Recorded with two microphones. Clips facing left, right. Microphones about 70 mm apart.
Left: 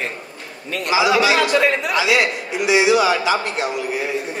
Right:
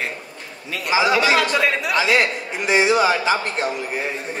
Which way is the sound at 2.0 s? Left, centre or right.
Right.